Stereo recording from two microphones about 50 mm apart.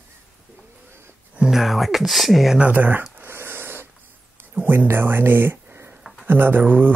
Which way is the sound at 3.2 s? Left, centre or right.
Right.